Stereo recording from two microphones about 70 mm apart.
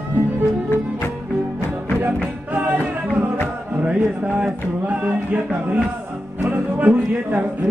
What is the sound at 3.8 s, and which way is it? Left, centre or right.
Music, centre.